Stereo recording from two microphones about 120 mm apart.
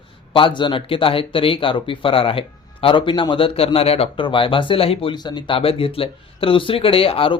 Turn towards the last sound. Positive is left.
turn(degrees=50)  # may be behind; listen again after turning